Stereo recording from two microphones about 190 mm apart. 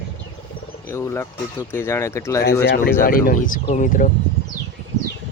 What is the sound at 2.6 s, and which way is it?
Speech, 60° left (ahead or behind).